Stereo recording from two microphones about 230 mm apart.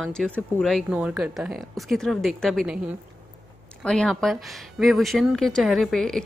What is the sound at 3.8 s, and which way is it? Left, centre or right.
Speech, centre.